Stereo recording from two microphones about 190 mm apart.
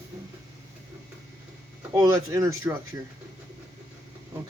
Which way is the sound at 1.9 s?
20° right (ahead or behind).